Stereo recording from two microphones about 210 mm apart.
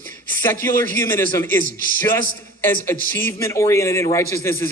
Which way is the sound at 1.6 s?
40° right (ahead or behind).